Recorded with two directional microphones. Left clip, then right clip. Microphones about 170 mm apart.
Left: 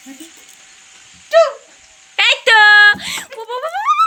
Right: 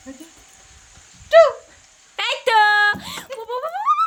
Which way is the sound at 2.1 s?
Centre (ahead or behind).